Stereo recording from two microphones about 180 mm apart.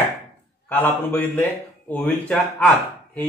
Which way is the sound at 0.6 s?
10° left (ahead or behind).